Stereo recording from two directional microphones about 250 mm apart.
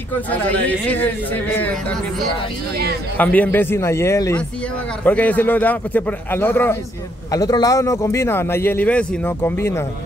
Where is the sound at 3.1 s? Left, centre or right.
Centre.